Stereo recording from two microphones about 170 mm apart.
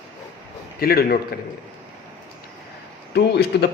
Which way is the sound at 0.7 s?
60° left (ahead or behind).